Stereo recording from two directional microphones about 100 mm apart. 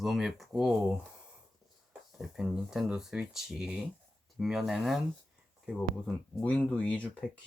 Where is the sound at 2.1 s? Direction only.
5° right (ahead or behind).